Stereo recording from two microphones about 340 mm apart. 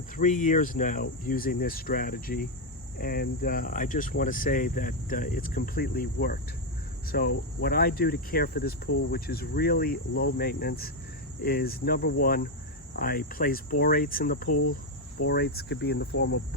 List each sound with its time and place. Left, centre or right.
0.2 s speech: left